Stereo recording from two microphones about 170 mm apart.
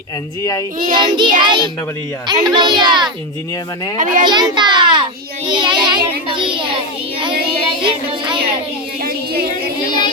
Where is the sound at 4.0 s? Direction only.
50° right (ahead or behind).